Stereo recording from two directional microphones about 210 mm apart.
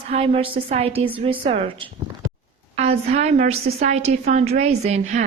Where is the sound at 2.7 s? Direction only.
30° right (ahead or behind).